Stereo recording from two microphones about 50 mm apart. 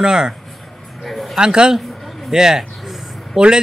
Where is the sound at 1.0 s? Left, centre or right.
Centre.